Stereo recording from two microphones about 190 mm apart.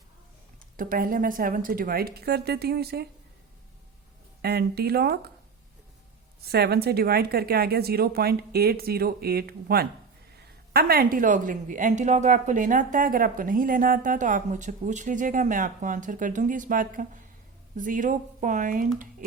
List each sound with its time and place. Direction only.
0.8 s a woman's voice: 45° right (ahead or behind)
4.4 s speech: 55° right (ahead or behind)
6.4 s a woman's voice: 55° right (ahead or behind)